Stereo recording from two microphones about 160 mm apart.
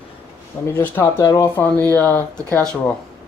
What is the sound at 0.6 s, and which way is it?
Speech, 15° left (ahead or behind).